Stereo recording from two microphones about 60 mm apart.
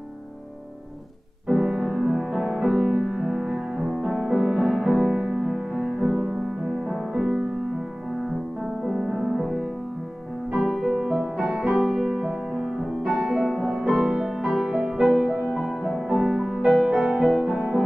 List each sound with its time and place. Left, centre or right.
1.5 s music: centre
6.8 s music: centre
8.8 s music: centre